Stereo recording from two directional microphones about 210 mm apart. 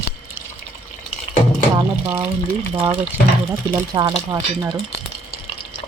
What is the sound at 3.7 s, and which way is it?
Speech, 20° right (ahead or behind).